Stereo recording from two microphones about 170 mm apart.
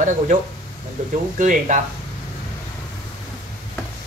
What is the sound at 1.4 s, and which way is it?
Speech, 50° right (ahead or behind).